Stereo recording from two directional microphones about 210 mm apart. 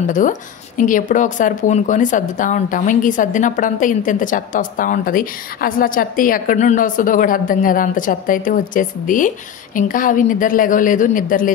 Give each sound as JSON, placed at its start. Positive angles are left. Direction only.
{"t": 0.1, "sound": "speech", "side_deg": 40}